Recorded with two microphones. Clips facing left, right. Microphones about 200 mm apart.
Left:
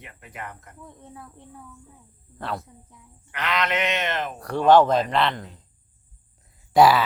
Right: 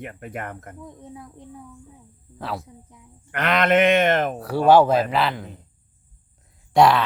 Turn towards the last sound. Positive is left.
turn(degrees=5)  # may be behind; listen again after turning